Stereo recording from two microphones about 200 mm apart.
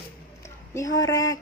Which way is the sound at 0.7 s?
15° left (ahead or behind).